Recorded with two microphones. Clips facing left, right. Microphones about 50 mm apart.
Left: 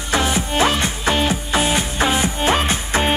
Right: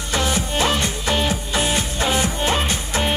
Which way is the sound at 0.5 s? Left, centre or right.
Left.